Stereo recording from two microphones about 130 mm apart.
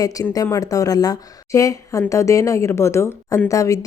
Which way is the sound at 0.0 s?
25° left (ahead or behind).